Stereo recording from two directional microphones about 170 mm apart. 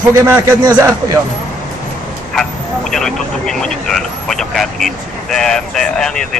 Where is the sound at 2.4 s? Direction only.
Centre (ahead or behind).